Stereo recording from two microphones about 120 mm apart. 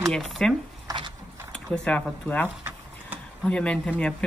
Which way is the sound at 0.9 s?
40° right (ahead or behind).